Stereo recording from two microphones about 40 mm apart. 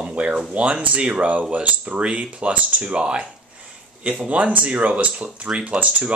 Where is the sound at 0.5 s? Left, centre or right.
Right.